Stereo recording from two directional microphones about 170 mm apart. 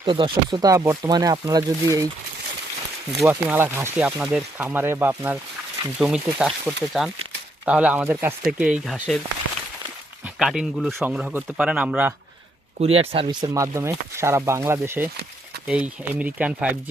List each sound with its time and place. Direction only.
0.0 s speech: 30° right (ahead or behind)
3.2 s speech: 10° right (ahead or behind)
10.3 s speech: 5° right (ahead or behind)
12.8 s speech: 35° right (ahead or behind); by 16.7 s 5° right (ahead or behind)